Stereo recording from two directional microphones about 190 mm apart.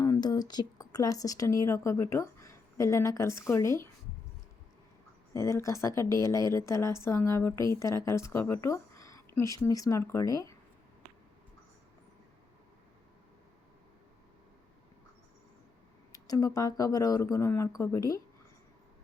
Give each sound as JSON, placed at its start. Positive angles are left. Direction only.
{"t": 0.0, "sound": "speech", "side_deg": 20}
{"t": 5.3, "sound": "speech", "side_deg": 15}
{"t": 16.1, "sound": "speech", "side_deg": 20}